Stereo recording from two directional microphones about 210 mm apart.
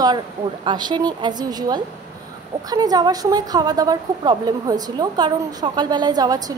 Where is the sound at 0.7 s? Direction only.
20° right (ahead or behind).